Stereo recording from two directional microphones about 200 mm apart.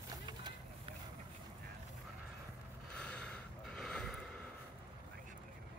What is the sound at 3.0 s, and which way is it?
Gasp, 5° left (ahead or behind).